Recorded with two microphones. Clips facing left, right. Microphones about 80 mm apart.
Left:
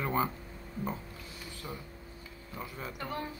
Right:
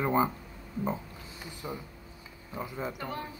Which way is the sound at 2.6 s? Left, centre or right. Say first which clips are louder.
Right 6 dB; centre.